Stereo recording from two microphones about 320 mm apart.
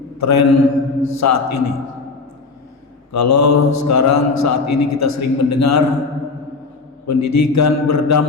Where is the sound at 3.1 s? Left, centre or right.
Left.